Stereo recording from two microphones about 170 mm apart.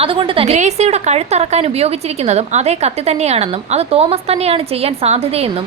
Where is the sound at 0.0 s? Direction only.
30° right (ahead or behind).